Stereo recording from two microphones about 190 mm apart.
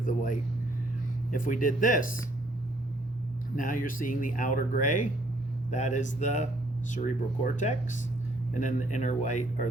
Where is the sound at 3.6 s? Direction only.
45° left (ahead or behind).